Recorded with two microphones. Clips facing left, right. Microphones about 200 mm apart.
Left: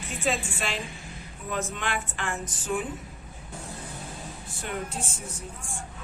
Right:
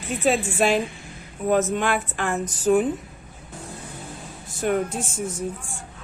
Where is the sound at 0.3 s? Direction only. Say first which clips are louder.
Right 9 dB; 45° right (ahead or behind).